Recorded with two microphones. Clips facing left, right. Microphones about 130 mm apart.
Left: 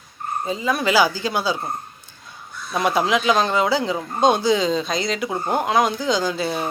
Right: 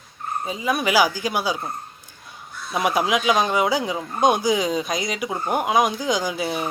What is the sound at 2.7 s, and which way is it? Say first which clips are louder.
Speech: left 1 dB; 10° right (ahead or behind).